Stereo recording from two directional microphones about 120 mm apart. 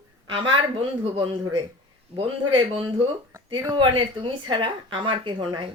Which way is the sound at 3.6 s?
35° right (ahead or behind).